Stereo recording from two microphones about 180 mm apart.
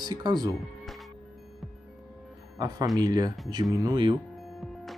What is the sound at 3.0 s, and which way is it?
Speech, 20° right (ahead or behind).